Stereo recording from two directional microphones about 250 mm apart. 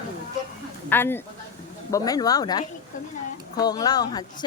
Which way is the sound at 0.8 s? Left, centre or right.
Centre.